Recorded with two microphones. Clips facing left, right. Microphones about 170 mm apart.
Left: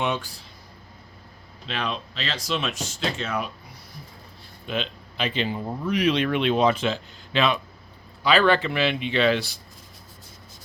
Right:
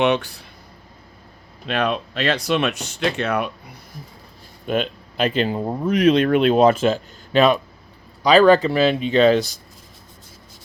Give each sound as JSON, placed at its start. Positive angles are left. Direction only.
{"t": 0.0, "sound": "speech", "side_deg": -75}
{"t": 1.6, "sound": "speech", "side_deg": -60}
{"t": 4.6, "sound": "speech", "side_deg": -50}